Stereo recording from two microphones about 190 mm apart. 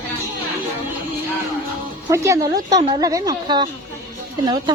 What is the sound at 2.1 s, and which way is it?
A woman's voice, 15° right (ahead or behind).